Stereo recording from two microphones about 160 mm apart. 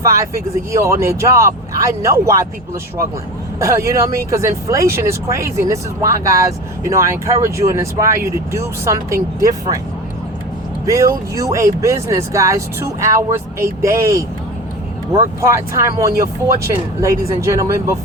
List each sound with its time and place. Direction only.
0.0 s speech: 20° right (ahead or behind)
3.6 s speech: 20° right (ahead or behind)
10.8 s speech: 20° right (ahead or behind)